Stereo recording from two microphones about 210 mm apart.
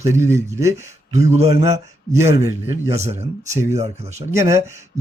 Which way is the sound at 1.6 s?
15° right (ahead or behind).